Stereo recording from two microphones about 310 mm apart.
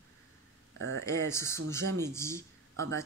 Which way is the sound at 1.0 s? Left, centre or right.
Centre.